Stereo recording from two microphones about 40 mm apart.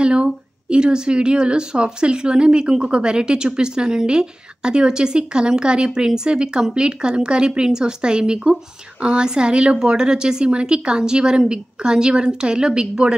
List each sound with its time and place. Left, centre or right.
0.0 s a woman's voice: right